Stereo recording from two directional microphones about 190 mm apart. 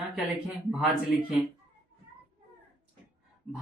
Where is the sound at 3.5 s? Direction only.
Centre (ahead or behind).